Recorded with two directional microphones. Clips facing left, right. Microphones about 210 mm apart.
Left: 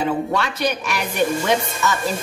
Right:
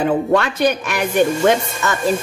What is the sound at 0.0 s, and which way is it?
Speech, 55° right (ahead or behind).